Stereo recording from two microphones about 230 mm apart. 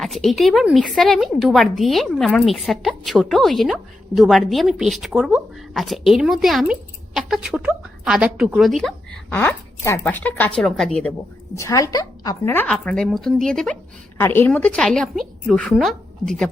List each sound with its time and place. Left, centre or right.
0.0 s a woman's voice: centre
11.5 s a woman's voice: centre